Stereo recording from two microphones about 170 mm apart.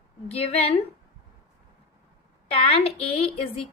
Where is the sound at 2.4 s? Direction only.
35° left (ahead or behind).